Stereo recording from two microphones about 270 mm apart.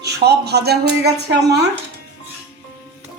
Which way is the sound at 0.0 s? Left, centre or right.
Right.